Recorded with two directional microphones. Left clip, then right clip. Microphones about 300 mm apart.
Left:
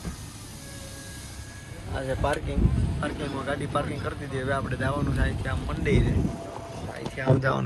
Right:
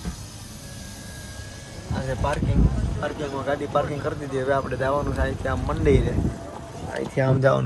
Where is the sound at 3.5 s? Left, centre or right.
Centre.